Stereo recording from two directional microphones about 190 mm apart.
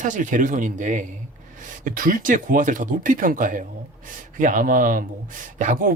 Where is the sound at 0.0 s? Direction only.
40° right (ahead or behind).